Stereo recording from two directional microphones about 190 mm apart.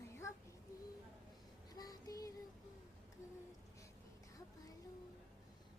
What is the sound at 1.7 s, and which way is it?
Child singing, 20° left (ahead or behind).